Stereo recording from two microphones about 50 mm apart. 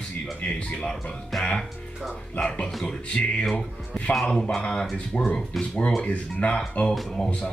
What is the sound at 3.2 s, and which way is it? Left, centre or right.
Speech, left.